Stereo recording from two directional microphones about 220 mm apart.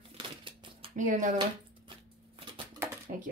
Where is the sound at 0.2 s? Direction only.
25° right (ahead or behind).